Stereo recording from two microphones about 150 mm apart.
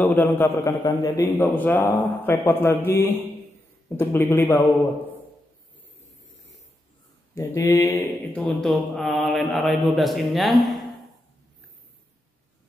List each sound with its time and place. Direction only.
0.0 s a man's voice: 15° left (ahead or behind)
7.3 s speech: 20° left (ahead or behind); by 10.8 s centre (ahead or behind)